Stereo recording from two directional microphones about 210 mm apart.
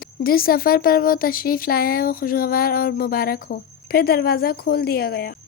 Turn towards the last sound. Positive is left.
turn(degrees=45)  # may be behind; listen again after turning